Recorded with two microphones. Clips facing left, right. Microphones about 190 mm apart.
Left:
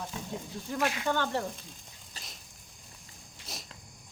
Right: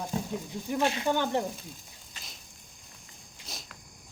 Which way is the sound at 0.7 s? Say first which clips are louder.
Right 3 dB; 25° right (ahead or behind).